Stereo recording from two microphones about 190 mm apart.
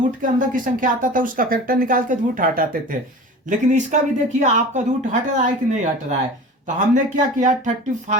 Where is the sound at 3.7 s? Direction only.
40° right (ahead or behind).